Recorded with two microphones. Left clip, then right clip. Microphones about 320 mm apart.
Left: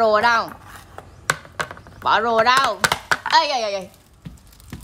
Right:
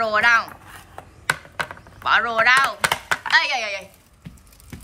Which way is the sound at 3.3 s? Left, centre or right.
Centre.